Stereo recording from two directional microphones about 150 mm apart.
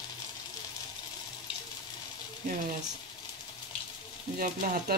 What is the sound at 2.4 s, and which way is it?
Speech, 65° right (ahead or behind).